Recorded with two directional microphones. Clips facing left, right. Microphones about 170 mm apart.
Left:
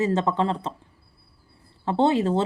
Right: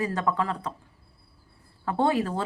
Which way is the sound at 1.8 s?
25° left (ahead or behind).